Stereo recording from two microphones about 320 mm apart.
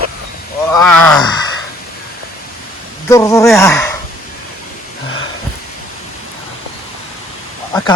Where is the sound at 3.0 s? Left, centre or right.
Centre.